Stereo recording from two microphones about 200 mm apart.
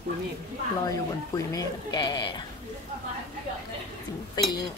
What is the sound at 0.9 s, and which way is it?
Speech, 20° left (ahead or behind).